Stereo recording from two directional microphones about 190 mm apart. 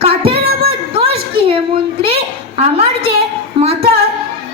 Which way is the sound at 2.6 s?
30° right (ahead or behind).